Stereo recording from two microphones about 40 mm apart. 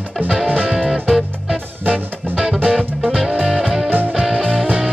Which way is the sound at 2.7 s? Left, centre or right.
Centre.